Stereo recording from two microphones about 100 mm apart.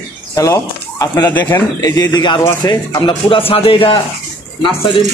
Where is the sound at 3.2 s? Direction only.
70° left (ahead or behind).